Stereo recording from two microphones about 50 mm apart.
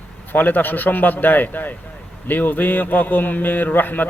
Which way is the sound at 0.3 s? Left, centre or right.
Left.